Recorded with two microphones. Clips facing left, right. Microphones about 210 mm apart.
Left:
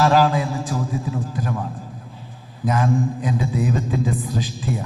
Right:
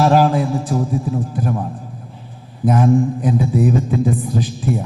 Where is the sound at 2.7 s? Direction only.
55° right (ahead or behind).